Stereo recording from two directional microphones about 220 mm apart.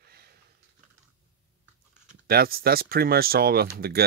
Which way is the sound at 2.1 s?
45° right (ahead or behind).